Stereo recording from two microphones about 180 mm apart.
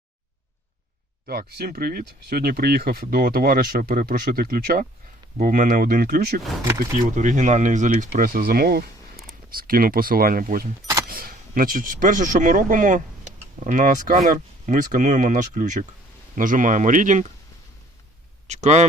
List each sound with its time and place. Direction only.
1.3 s speech: 60° right (ahead or behind)
7.2 s speech: 40° right (ahead or behind)
18.4 s speech: 40° right (ahead or behind)